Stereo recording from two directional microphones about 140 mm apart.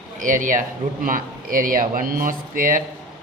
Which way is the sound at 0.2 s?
70° right (ahead or behind).